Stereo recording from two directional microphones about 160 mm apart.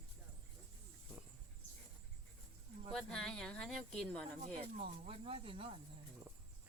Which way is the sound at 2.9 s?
5° left (ahead or behind).